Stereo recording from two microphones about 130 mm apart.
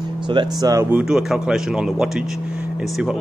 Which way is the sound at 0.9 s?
5° right (ahead or behind).